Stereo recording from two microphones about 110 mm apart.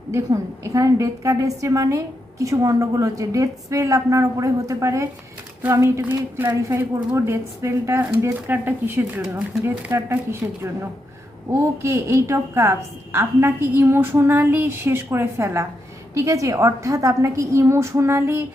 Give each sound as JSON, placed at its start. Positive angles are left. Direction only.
{"t": 0.1, "sound": "a woman's voice", "side_deg": -30}
{"t": 11.8, "sound": "a woman's voice", "side_deg": -25}